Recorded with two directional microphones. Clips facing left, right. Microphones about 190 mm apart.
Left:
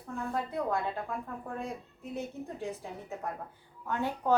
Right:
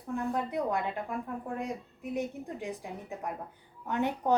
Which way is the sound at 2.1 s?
15° right (ahead or behind).